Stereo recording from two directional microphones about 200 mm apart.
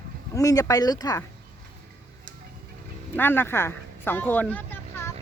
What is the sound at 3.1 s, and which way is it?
Speech, 10° left (ahead or behind).